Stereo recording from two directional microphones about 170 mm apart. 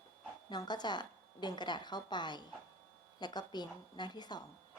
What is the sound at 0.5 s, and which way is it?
A woman's voice, 25° left (ahead or behind).